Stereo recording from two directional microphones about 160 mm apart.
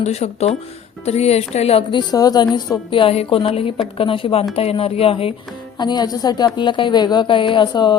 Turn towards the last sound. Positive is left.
turn(degrees=30)  # may be behind; listen again after turning